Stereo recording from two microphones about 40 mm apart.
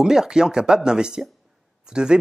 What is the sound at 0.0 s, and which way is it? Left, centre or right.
Speech, centre.